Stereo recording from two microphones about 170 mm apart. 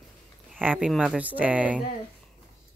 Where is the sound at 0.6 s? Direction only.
5° right (ahead or behind).